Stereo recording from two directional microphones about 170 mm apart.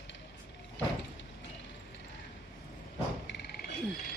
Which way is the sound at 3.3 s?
75° left (ahead or behind).